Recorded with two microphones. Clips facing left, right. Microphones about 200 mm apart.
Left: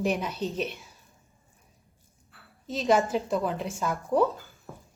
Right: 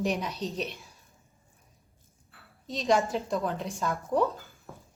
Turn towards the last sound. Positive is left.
turn(degrees=0)  # may be behind; listen again after turning